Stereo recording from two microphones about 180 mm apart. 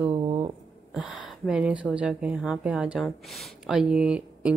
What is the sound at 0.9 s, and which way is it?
Speech, centre (ahead or behind).